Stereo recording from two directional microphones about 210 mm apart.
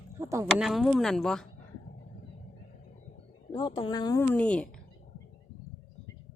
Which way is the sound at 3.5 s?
20° left (ahead or behind).